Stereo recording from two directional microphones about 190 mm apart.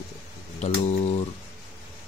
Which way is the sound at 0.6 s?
35° left (ahead or behind).